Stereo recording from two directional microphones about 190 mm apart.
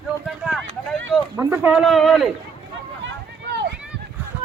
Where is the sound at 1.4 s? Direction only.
10° right (ahead or behind).